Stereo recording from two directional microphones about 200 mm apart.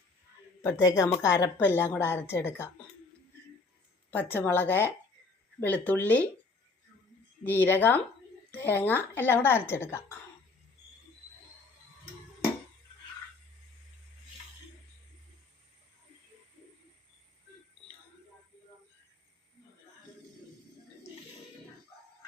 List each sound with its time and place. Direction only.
0.6 s a woman's voice: 15° left (ahead or behind)
4.1 s a woman's voice: 10° left (ahead or behind)
7.4 s a woman's voice: 10° left (ahead or behind)